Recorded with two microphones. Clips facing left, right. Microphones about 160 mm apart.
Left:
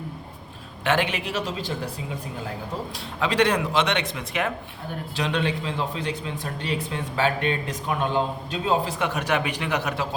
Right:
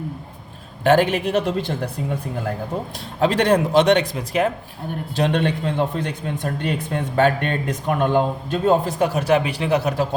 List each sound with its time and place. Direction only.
0.9 s a man's voice: 45° right (ahead or behind)
5.1 s a man's voice: 50° right (ahead or behind); by 10.1 s 30° right (ahead or behind)